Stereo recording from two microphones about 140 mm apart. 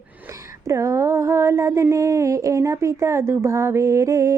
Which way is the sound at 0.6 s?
20° right (ahead or behind).